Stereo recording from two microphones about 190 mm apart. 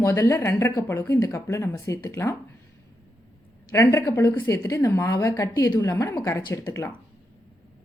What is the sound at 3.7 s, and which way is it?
A woman's voice, 15° left (ahead or behind).